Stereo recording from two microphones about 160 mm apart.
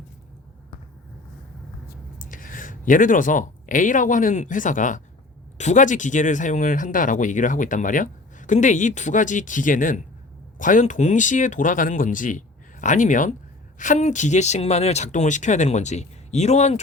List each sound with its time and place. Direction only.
2.1 s speech: 60° left (ahead or behind)